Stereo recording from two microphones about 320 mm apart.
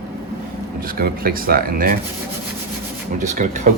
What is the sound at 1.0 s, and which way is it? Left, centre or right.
Speech, right.